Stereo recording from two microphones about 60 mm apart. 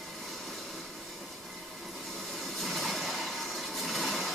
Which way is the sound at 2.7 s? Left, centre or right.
Centre.